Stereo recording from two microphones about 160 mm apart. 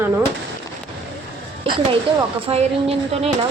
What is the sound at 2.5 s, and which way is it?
Speech, 40° right (ahead or behind).